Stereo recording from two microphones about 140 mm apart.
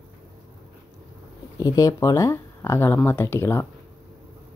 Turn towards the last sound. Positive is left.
turn(degrees=15)  # may be behind; listen again after turning